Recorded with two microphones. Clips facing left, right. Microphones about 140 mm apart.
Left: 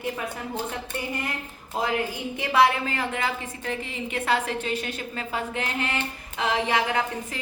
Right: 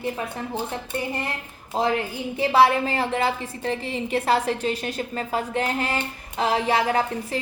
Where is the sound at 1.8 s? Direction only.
30° right (ahead or behind).